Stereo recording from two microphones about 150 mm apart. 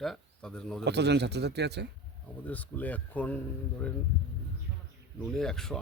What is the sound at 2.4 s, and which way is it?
Speech, 10° left (ahead or behind).